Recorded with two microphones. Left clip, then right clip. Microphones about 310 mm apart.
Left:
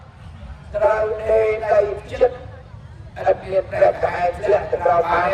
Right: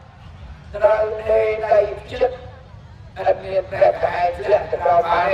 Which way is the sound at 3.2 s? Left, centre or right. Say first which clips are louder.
Left 1 dB; right.